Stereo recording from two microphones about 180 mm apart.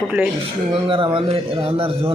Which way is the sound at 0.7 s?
30° right (ahead or behind).